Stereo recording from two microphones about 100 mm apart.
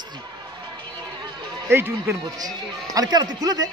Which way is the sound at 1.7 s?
25° right (ahead or behind).